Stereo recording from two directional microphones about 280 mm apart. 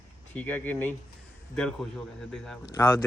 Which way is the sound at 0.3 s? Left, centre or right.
Centre.